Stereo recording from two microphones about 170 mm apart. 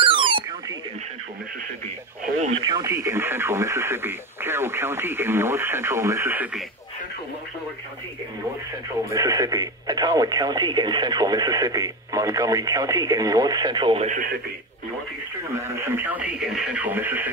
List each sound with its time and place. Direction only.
0.0 s a sound: 30° right (ahead or behind)
2.3 s radio: 40° right (ahead or behind)
2.6 s speech: 20° right (ahead or behind)
9.1 s speech: 20° right (ahead or behind)
15.5 s speech: 15° right (ahead or behind)